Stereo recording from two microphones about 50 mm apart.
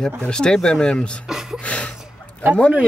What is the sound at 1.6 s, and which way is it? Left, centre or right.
Speech, left.